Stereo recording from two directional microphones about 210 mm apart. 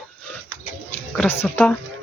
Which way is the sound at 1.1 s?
10° left (ahead or behind).